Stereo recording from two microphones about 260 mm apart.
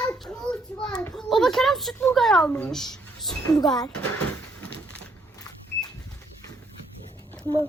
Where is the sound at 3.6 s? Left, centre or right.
Centre.